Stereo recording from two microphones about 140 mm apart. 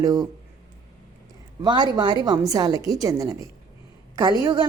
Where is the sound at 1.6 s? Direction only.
30° right (ahead or behind).